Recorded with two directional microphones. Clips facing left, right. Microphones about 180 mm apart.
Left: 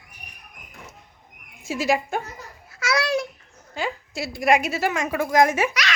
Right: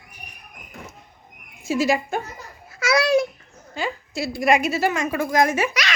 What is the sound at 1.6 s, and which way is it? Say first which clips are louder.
Speech: right 2 dB; 15° left (ahead or behind).